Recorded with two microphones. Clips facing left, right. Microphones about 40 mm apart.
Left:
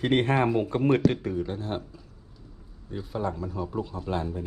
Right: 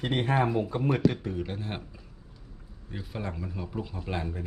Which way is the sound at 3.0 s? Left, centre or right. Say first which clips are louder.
Left 6 dB; right.